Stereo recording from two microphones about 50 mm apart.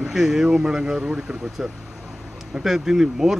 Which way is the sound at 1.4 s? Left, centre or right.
Centre.